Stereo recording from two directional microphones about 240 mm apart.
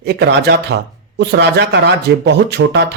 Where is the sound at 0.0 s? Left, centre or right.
Right.